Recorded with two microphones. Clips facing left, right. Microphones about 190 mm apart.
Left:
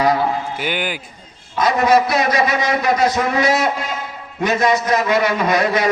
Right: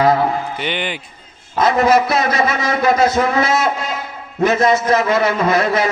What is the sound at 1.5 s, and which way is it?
A man's voice, 25° right (ahead or behind).